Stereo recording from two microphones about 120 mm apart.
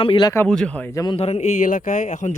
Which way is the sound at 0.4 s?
10° left (ahead or behind).